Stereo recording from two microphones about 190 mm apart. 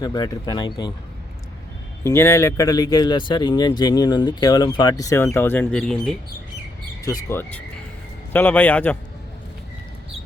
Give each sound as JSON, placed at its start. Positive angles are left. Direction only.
{"t": 0.0, "sound": "speech", "side_deg": 20}
{"t": 2.0, "sound": "speech", "side_deg": 15}
{"t": 7.0, "sound": "a man's voice", "side_deg": 15}